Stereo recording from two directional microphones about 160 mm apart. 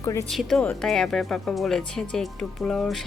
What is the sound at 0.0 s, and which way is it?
Speech, 20° left (ahead or behind).